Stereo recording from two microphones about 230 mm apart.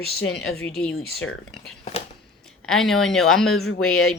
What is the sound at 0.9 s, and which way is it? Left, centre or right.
Speech, left.